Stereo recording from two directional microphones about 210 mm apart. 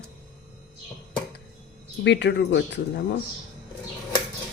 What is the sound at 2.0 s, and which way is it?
Speech, 55° left (ahead or behind).